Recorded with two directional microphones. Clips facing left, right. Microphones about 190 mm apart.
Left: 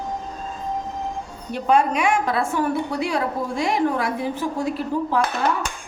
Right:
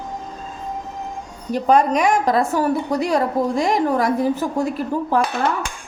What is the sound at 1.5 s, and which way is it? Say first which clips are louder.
A woman's voice: right 3 dB; 40° right (ahead or behind).